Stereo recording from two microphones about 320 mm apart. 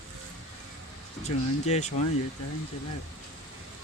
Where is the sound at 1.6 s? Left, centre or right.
Left.